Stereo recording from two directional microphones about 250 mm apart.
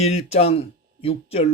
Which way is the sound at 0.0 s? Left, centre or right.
Left.